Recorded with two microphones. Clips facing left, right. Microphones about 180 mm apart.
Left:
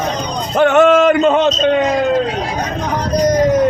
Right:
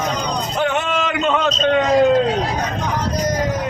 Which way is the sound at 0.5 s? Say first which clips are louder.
Left 12 dB; 70° left (ahead or behind).